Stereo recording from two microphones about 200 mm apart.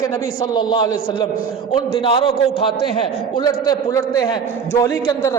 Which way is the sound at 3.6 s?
20° left (ahead or behind).